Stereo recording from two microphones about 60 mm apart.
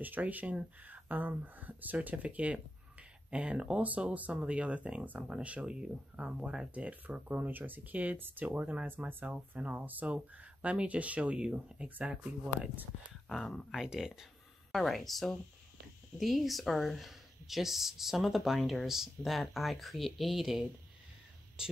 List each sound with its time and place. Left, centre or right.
0.0 s speech: right; by 6.7 s centre
6.7 s speech: right
8.5 s speech: right
13.3 s speech: centre
13.7 s speech: centre